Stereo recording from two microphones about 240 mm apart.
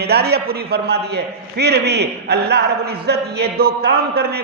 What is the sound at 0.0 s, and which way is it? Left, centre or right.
A man's voice, right.